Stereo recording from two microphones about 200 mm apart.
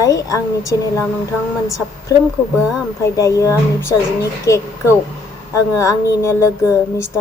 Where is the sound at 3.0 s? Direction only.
15° left (ahead or behind).